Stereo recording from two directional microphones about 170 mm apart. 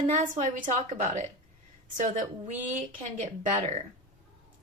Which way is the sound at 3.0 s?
45° right (ahead or behind).